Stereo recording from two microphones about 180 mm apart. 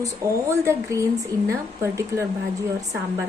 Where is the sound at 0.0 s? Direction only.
15° right (ahead or behind).